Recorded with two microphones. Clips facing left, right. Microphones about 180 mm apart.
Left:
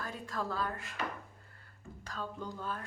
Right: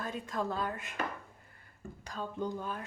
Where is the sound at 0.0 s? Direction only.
20° right (ahead or behind).